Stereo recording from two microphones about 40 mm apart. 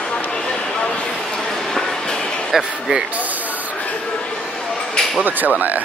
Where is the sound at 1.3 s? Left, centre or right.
Centre.